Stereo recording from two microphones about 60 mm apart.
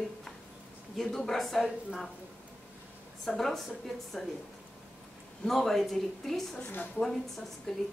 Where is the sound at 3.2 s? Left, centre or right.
Centre.